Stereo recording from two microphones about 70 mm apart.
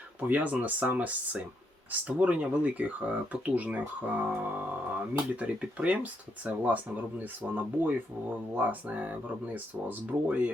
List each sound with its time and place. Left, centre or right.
0.2 s speech: right